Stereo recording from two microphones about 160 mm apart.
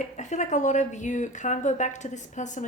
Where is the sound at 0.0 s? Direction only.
50° left (ahead or behind).